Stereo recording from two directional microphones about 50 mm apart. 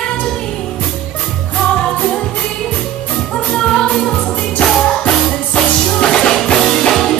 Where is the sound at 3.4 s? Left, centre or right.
Centre.